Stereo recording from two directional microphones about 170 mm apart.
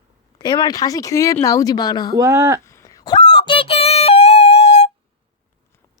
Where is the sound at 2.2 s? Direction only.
20° right (ahead or behind).